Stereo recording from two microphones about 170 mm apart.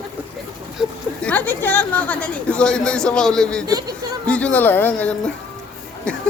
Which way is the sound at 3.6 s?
20° right (ahead or behind).